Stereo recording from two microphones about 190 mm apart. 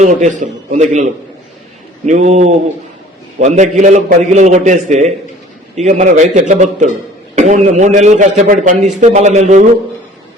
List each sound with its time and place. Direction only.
0.0 s a man's voice: 40° right (ahead or behind)